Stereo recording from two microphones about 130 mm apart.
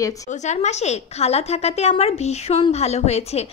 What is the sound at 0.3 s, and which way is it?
A woman's voice, 65° left (ahead or behind).